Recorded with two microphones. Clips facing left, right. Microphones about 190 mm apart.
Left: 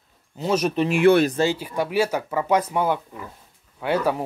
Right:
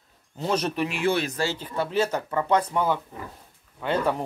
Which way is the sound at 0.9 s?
55° left (ahead or behind).